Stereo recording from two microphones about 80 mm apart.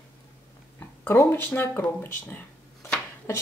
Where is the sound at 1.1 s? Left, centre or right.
Left.